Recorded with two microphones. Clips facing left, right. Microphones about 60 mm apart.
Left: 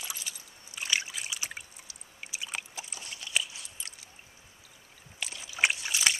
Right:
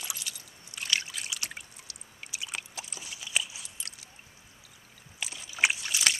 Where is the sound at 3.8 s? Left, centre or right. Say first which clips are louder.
Even; centre.